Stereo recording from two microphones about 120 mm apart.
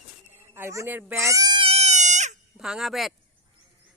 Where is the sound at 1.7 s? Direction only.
70° right (ahead or behind).